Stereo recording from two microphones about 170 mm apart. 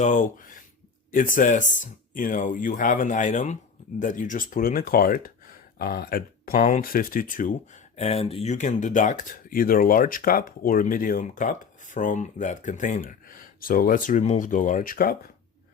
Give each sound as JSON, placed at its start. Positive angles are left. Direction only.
{"t": 0.0, "sound": "speech", "side_deg": 50}